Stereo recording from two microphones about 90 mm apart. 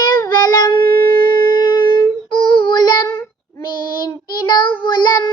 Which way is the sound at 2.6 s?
50° left (ahead or behind).